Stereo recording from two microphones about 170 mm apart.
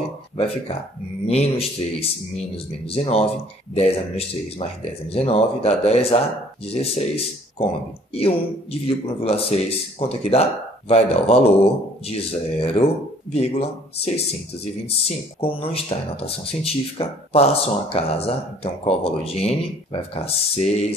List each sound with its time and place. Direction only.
1.2 s speech: 35° left (ahead or behind)